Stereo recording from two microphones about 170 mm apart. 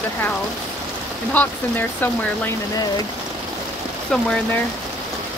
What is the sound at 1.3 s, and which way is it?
Speech, 10° left (ahead or behind).